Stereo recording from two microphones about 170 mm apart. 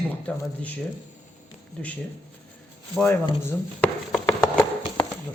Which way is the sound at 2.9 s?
10° left (ahead or behind).